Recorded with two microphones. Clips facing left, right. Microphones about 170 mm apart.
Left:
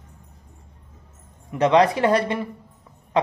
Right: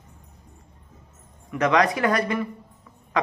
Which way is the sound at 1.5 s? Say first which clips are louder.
Left 4 dB; 25° left (ahead or behind).